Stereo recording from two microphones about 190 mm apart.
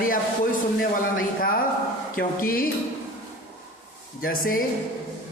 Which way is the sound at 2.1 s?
50° left (ahead or behind).